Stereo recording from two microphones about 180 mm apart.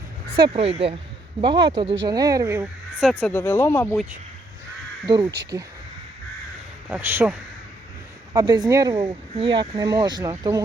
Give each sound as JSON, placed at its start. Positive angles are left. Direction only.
{"t": 0.3, "sound": "speech", "side_deg": -30}
{"t": 3.0, "sound": "speech", "side_deg": 0}
{"t": 5.0, "sound": "speech", "side_deg": -25}
{"t": 5.3, "sound": "speech", "side_deg": -65}
{"t": 6.8, "sound": "speech", "side_deg": -10}
{"t": 8.3, "sound": "speech", "side_deg": -20}